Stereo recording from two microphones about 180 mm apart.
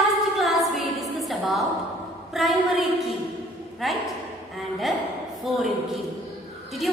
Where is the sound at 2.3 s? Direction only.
Centre (ahead or behind).